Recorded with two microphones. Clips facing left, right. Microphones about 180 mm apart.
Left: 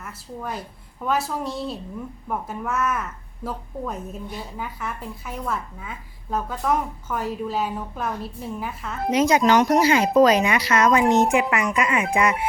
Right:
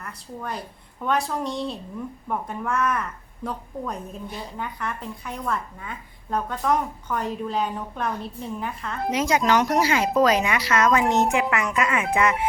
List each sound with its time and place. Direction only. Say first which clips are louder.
0.0 s a woman's voice: left 1 dB; 5° left (ahead or behind)
9.1 s speech: left 4 dB; 20° left (ahead or behind)